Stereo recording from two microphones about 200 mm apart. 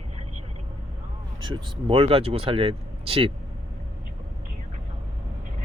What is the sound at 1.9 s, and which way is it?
Speech, 30° right (ahead or behind).